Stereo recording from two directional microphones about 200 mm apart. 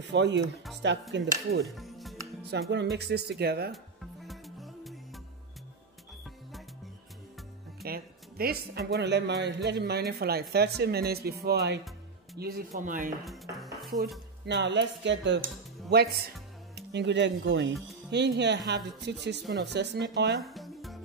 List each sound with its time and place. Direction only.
0.0 s speech: 60° right (ahead or behind)
1.8 s music: centre (ahead or behind)
2.7 s speech: 55° right (ahead or behind)
3.7 s music: centre (ahead or behind)
7.8 s speech: 50° right (ahead or behind)
14.4 s speech: 60° right (ahead or behind)
15.4 s music: 55° right (ahead or behind)
16.7 s speech: 60° right (ahead or behind)
20.4 s music: centre (ahead or behind)